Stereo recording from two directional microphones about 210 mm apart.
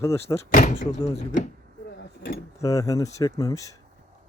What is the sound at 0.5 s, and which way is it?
Speech, 40° left (ahead or behind).